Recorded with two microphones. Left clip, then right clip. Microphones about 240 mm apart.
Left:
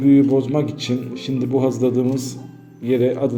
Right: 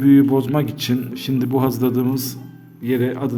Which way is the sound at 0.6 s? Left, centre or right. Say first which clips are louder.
Even; right.